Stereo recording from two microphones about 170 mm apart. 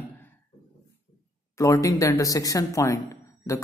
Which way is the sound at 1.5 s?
20° left (ahead or behind).